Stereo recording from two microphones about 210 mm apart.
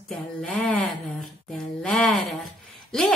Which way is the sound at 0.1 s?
5° left (ahead or behind).